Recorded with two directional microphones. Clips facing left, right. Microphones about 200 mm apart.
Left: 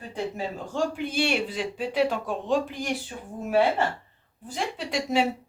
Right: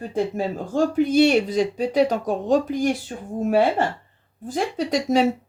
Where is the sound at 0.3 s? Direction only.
45° right (ahead or behind).